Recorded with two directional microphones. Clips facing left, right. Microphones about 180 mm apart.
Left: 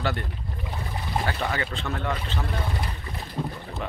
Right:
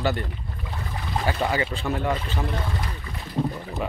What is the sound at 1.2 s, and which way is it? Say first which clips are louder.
Speech: right 6 dB; 15° right (ahead or behind).